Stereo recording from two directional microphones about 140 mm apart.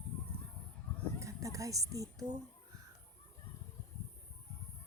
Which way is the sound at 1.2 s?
20° right (ahead or behind).